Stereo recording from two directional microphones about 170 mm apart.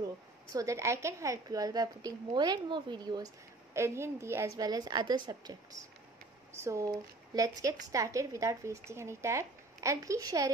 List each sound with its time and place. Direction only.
0.5 s a woman's voice: 20° right (ahead or behind)